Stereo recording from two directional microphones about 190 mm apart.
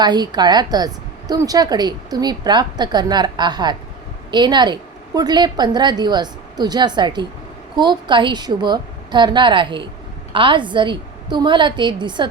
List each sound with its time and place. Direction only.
0.0 s a woman's voice: 20° right (ahead or behind)